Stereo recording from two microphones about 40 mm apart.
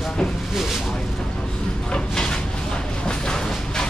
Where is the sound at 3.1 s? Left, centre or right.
Centre.